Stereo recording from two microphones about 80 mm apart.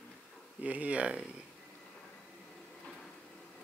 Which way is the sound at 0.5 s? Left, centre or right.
Centre.